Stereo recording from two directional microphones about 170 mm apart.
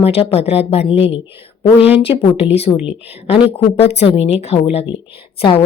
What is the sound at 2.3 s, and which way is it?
Speech, 35° left (ahead or behind).